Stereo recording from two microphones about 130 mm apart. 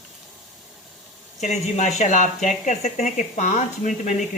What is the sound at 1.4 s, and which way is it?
Speech, 60° left (ahead or behind).